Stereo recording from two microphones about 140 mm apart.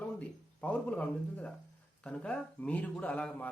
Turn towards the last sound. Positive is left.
turn(degrees=10)  # may be behind; listen again after turning